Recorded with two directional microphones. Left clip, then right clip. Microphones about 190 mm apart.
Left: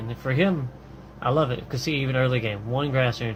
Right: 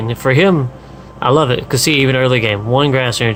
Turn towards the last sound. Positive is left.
turn(degrees=-40)  # may be behind; listen again after turning